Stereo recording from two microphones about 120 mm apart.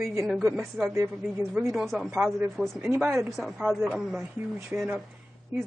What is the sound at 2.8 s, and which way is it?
Speech, 20° right (ahead or behind).